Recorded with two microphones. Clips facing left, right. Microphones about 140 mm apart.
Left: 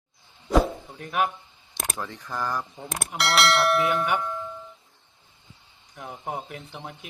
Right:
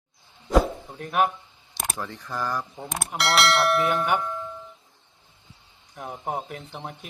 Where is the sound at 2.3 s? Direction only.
5° right (ahead or behind).